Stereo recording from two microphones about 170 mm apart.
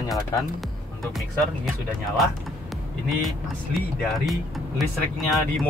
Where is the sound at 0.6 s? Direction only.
Centre (ahead or behind).